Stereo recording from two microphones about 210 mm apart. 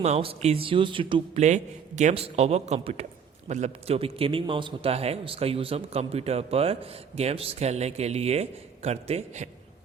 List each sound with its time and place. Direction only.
0.0 s a man's voice: 30° right (ahead or behind)